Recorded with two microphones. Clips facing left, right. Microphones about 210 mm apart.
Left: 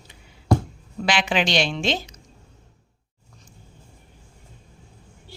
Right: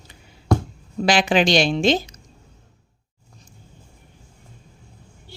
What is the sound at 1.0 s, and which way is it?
A woman's voice, 40° right (ahead or behind).